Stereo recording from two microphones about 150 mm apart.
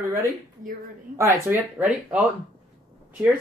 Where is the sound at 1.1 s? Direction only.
20° right (ahead or behind).